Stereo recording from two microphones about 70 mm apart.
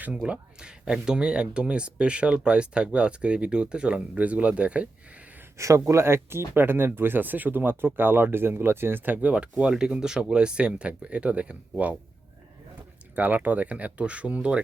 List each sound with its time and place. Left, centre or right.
0.1 s speech: centre
5.5 s speech: right
9.2 s speech: centre
13.1 s speech: right